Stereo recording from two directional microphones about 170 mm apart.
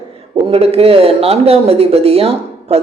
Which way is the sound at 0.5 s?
35° right (ahead or behind).